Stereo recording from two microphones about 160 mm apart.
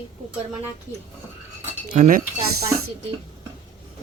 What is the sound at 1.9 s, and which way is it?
Speech, 50° right (ahead or behind).